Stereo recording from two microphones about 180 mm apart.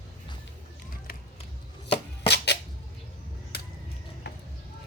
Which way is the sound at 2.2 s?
70° left (ahead or behind).